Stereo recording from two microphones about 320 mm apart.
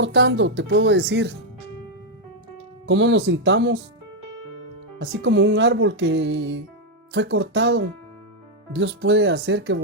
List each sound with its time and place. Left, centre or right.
0.0 s speech: right
2.8 s speech: right
4.9 s speech: right